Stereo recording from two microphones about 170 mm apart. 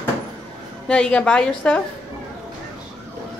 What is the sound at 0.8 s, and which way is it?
Speech, 5° left (ahead or behind).